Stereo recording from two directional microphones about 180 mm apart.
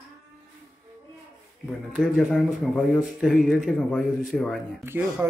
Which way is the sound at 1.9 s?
Centre (ahead or behind).